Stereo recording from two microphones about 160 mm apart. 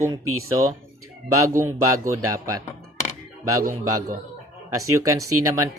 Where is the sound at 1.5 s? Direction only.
20° right (ahead or behind).